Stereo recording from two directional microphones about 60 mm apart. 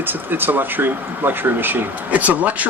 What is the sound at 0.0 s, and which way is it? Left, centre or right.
Speech, right.